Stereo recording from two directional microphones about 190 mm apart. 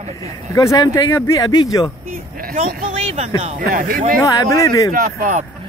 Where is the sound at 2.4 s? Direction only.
45° right (ahead or behind).